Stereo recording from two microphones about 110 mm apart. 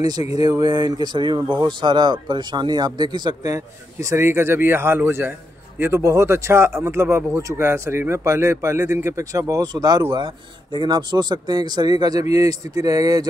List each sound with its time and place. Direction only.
0.4 s speech: 40° right (ahead or behind)